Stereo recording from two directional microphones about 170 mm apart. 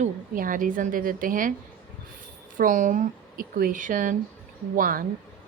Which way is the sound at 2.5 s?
50° right (ahead or behind).